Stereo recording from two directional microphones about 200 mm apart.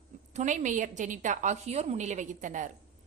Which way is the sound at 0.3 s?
40° right (ahead or behind).